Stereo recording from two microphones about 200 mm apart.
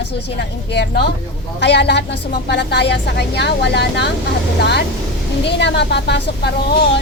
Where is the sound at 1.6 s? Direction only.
60° left (ahead or behind).